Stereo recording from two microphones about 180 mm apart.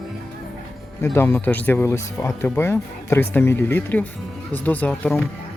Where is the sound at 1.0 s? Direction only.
10° left (ahead or behind).